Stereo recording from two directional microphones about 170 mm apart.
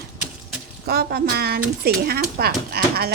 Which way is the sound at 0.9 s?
70° right (ahead or behind).